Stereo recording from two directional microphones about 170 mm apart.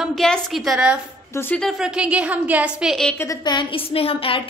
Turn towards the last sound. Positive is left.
turn(degrees=35)  # may be behind; listen again after turning